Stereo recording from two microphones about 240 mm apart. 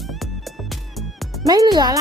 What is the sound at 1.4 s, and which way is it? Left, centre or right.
Speech, centre.